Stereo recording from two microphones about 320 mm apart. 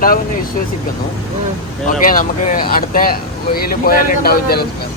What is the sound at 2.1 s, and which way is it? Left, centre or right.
Speech, left.